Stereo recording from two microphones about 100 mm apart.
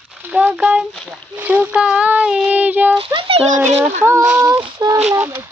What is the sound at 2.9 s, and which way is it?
Speech, 65° right (ahead or behind).